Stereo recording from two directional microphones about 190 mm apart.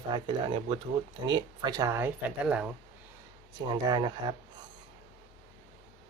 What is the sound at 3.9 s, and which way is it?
Speech, 25° right (ahead or behind).